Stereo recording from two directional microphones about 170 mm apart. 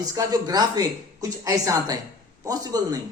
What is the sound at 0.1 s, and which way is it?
Speech, 20° right (ahead or behind).